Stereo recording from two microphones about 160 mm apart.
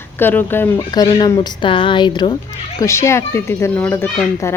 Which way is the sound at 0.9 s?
25° left (ahead or behind).